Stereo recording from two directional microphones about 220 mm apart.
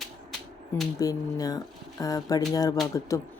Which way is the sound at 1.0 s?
15° left (ahead or behind).